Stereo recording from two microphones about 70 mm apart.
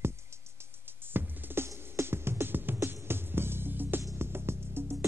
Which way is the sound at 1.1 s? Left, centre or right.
Right.